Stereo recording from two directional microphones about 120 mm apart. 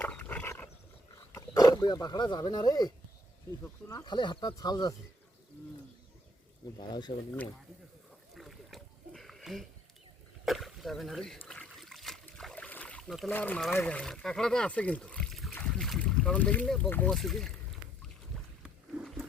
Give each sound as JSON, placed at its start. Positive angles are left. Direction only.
{"t": 0.0, "sound": "dog", "side_deg": 10}
{"t": 1.3, "sound": "speech", "side_deg": 30}
{"t": 3.6, "sound": "speech", "side_deg": 25}
{"t": 4.0, "sound": "speech", "side_deg": 40}
{"t": 6.7, "sound": "speech", "side_deg": 35}
{"t": 8.4, "sound": "a sound", "side_deg": 0}
{"t": 11.4, "sound": "trickle", "side_deg": 5}
{"t": 13.1, "sound": "speech", "side_deg": 0}
{"t": 13.3, "sound": "speech", "side_deg": 15}
{"t": 15.5, "sound": "boat", "side_deg": 5}
{"t": 17.1, "sound": "speech", "side_deg": 0}
{"t": 18.6, "sound": "wild animals", "side_deg": -5}